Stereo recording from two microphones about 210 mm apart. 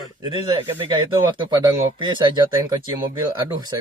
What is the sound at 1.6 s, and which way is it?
Speech, 20° right (ahead or behind).